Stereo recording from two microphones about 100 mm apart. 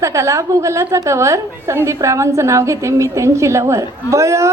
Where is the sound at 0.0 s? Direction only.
30° right (ahead or behind).